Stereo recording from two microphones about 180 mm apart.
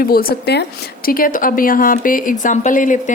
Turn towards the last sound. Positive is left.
turn(degrees=45)  # may be behind; listen again after turning